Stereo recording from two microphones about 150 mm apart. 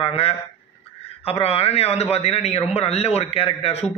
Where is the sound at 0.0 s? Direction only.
40° left (ahead or behind).